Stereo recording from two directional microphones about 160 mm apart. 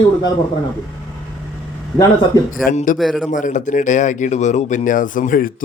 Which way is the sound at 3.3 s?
55° left (ahead or behind).